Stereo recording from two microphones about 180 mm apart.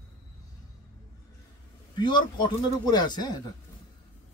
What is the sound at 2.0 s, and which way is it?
A man's voice, 25° left (ahead or behind).